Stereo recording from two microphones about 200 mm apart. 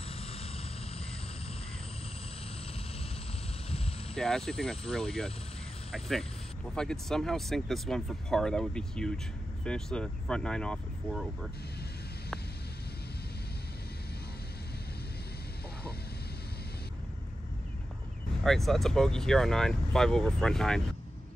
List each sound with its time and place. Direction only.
0.2 s vehicle: 30° left (ahead or behind)
4.1 s speech: 5° left (ahead or behind)
18.4 s speech: centre (ahead or behind)